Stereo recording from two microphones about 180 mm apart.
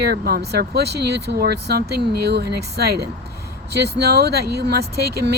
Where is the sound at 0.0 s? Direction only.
60° right (ahead or behind).